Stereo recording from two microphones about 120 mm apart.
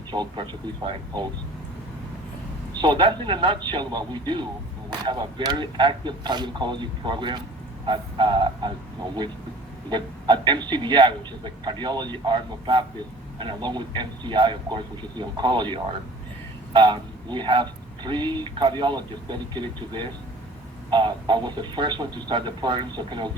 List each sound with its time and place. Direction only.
0.1 s a man's voice: 40° right (ahead or behind)
2.8 s a man's voice: 40° right (ahead or behind)
9.9 s a man's voice: 40° right (ahead or behind)